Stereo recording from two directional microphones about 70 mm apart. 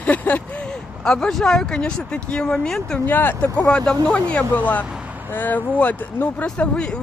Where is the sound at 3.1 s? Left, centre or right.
Left.